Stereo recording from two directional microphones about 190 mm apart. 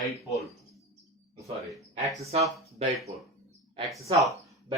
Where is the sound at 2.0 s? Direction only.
35° right (ahead or behind).